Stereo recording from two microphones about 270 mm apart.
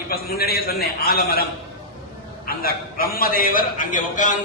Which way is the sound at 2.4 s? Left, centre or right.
Left.